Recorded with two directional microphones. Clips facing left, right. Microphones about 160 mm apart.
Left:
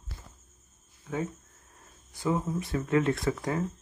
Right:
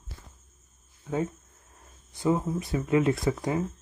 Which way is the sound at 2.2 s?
25° right (ahead or behind).